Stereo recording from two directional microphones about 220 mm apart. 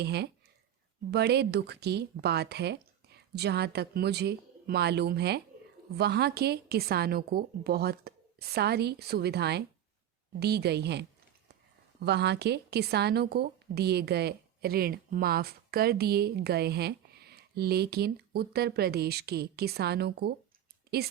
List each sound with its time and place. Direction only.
0.0 s a woman's voice: 50° right (ahead or behind)